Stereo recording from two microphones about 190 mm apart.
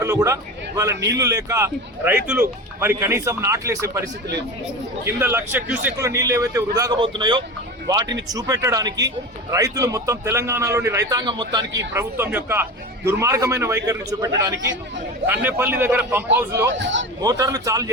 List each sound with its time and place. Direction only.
0.0 s a man's voice: 15° right (ahead or behind)
5.0 s a man's voice: 10° right (ahead or behind)
11.9 s a man's voice: 10° right (ahead or behind)
16.7 s speech: 75° right (ahead or behind)
17.2 s a man's voice: 20° right (ahead or behind)